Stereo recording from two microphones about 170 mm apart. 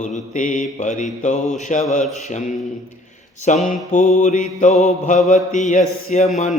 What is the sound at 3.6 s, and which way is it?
A man's voice, 45° left (ahead or behind).